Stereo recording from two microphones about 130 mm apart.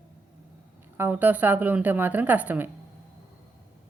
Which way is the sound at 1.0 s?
15° right (ahead or behind).